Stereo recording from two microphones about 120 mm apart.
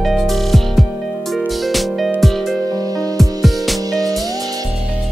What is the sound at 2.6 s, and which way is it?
Music, 30° right (ahead or behind).